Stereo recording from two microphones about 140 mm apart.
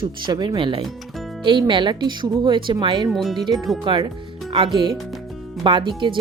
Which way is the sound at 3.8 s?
35° right (ahead or behind).